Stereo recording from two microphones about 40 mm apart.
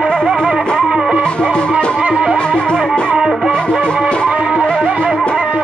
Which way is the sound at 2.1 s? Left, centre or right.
Centre.